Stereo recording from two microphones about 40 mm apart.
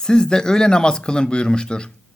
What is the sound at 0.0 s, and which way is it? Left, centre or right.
Speech, centre.